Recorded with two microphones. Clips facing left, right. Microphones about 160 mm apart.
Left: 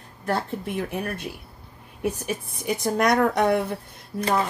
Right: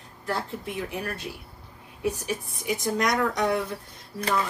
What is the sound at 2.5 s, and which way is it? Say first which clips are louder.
A woman's voice: left 3 dB; 60° left (ahead or behind).